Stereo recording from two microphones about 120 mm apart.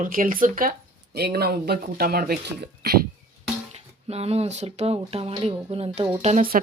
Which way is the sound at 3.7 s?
60° right (ahead or behind).